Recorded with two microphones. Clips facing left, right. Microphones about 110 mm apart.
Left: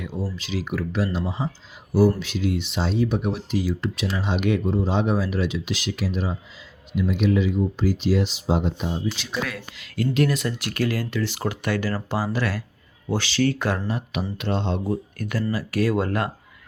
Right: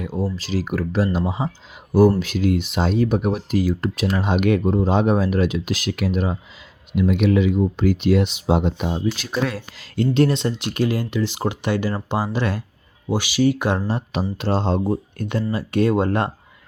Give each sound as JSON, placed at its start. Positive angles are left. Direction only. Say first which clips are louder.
{"t": 0.0, "sound": "speech", "louder": "right 5 dB", "side_deg": -40}
{"t": 9.1, "sound": "speech", "louder": "right 5 dB", "side_deg": -45}
{"t": 9.5, "sound": "speech", "louder": "right 4 dB", "side_deg": -35}